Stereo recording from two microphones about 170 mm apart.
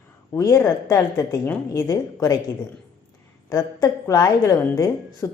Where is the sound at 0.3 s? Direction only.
15° left (ahead or behind).